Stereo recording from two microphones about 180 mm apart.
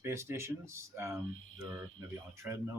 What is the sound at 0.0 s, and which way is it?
Speech, 15° right (ahead or behind).